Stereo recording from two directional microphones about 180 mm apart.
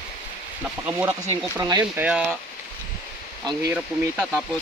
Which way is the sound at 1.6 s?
20° right (ahead or behind).